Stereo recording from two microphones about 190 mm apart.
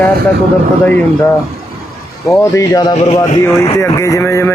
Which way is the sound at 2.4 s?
15° left (ahead or behind).